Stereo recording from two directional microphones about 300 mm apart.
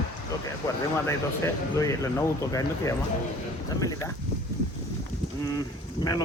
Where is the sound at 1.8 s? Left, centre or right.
Centre.